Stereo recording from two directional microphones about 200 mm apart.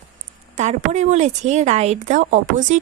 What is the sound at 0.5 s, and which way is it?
A woman's voice, 35° right (ahead or behind).